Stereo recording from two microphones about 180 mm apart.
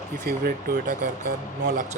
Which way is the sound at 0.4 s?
50° right (ahead or behind).